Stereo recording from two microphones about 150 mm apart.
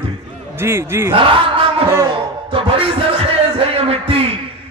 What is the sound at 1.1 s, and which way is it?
Speech, 35° right (ahead or behind).